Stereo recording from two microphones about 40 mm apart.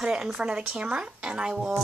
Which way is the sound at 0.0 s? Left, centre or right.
Centre.